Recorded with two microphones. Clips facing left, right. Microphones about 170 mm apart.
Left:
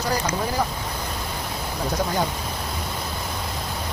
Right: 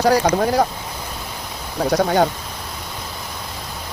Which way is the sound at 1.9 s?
70° right (ahead or behind).